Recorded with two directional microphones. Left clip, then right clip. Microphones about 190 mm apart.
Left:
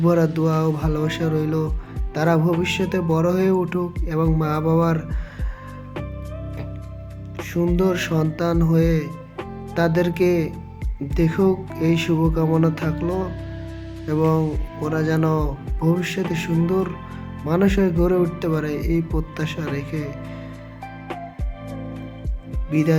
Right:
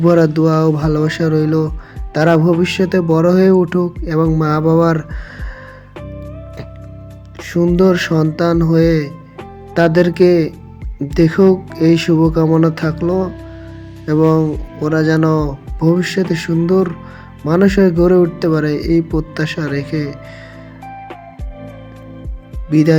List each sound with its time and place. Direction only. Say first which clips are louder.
0.0 s speech: right 8 dB; 20° right (ahead or behind)
7.7 s speech: right 9 dB; 20° right (ahead or behind)
22.7 s speech: right 8 dB; 20° right (ahead or behind)